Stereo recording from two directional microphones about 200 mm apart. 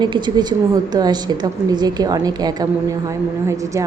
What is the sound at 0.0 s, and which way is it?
A woman's voice, 20° right (ahead or behind).